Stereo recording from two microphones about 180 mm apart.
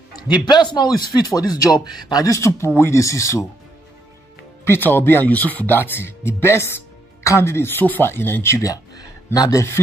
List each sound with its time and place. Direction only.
0.1 s a man's voice: 25° left (ahead or behind)
4.6 s speech: 10° left (ahead or behind)